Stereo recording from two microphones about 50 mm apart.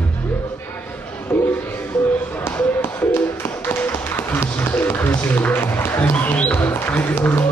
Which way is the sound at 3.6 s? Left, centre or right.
Left.